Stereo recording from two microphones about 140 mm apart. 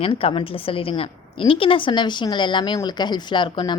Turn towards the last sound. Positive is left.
turn(degrees=35)  # may be behind; listen again after turning